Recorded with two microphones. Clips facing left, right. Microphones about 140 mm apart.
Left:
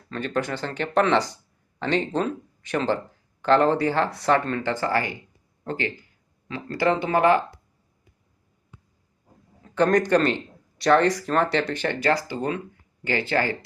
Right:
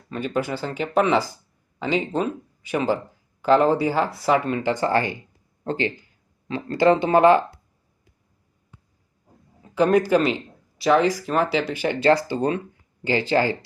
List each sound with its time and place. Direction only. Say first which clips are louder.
0.1 s speech: right 2 dB; 10° right (ahead or behind)
9.6 s speech: right 2 dB; 10° right (ahead or behind)
11.9 s speech: right 7 dB; 25° right (ahead or behind)